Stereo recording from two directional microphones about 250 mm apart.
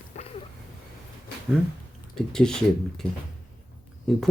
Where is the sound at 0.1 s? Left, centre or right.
Left.